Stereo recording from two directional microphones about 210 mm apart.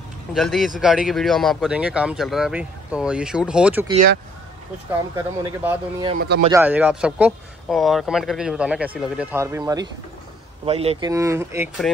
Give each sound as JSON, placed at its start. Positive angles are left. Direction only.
{"t": 0.3, "sound": "speech", "side_deg": 0}
{"t": 5.1, "sound": "speech", "side_deg": -10}
{"t": 6.1, "sound": "speech", "side_deg": -50}
{"t": 6.5, "sound": "speech", "side_deg": -10}
{"t": 10.6, "sound": "speech", "side_deg": -30}
{"t": 11.1, "sound": "speech", "side_deg": -15}